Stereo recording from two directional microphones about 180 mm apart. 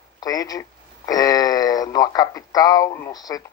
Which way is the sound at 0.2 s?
20° left (ahead or behind).